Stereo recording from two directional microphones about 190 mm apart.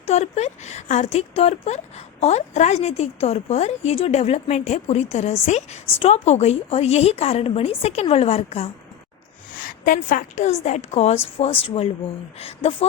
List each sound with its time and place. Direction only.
0.0 s a woman's voice: 35° left (ahead or behind)
9.6 s a woman's voice: 45° left (ahead or behind); by 12.7 s 30° left (ahead or behind)